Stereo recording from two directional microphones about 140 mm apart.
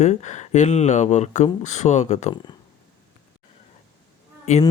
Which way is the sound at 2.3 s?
30° left (ahead or behind).